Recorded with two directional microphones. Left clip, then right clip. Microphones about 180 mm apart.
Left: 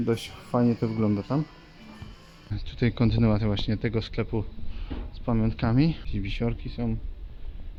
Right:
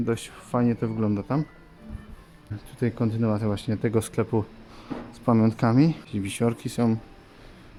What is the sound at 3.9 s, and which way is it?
Speech, 20° right (ahead or behind).